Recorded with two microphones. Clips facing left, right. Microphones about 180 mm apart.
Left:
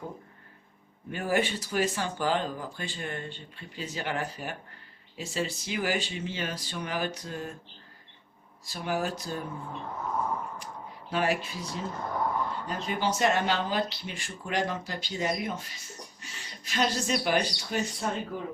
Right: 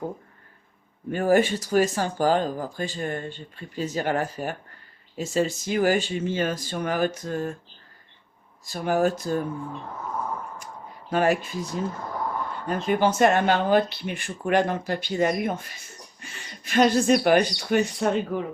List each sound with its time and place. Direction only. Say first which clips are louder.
1.1 s speech: right 8 dB; 45° right (ahead or behind)
8.6 s speech: right 8 dB; 50° right (ahead or behind)
11.1 s speech: right 6 dB; 50° right (ahead or behind); by 18.4 s 70° right (ahead or behind)